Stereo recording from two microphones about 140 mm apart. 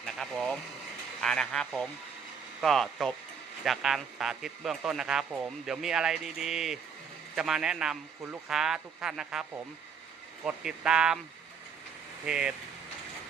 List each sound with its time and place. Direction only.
0.0 s speech: 5° left (ahead or behind)
12.2 s speech: 5° right (ahead or behind)